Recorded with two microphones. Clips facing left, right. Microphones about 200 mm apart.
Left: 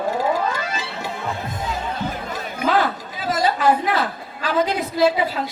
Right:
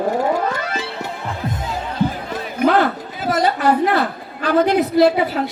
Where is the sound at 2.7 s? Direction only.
60° right (ahead or behind).